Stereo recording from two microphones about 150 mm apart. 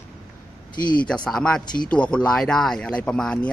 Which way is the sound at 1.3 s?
5° left (ahead or behind).